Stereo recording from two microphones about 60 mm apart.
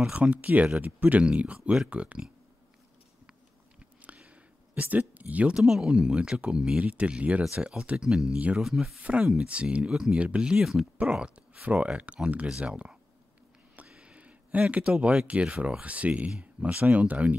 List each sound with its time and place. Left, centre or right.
0.1 s speech: right
4.0 s a sound: right
5.6 s speech: centre
8.0 s speech: centre
9.0 s speech: centre
9.8 s speech: centre
11.0 s speech: centre
13.8 s a sound: centre
15.2 s speech: right